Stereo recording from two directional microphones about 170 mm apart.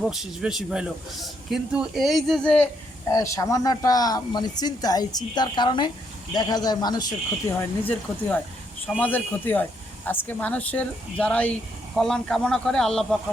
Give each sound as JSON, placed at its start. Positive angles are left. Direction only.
{"t": 0.0, "sound": "a man's voice", "side_deg": 0}
{"t": 3.1, "sound": "a man's voice", "side_deg": 20}